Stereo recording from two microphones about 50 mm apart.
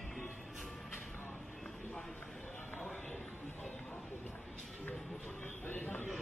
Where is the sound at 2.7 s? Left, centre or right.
Left.